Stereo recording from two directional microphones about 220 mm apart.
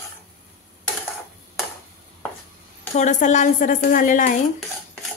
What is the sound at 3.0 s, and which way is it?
Speech, 35° left (ahead or behind).